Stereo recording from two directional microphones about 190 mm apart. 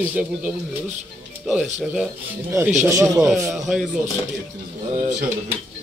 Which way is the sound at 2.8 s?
15° right (ahead or behind).